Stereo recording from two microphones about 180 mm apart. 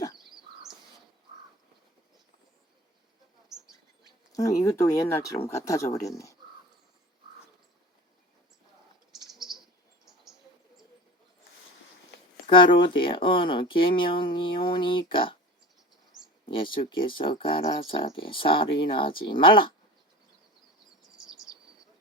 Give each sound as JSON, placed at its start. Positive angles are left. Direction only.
{"t": 3.5, "sound": "bird", "side_deg": 0}
{"t": 4.0, "sound": "speech", "side_deg": 20}
{"t": 9.2, "sound": "cricket", "side_deg": 0}
{"t": 12.5, "sound": "speech", "side_deg": 25}
{"t": 16.5, "sound": "speech", "side_deg": 30}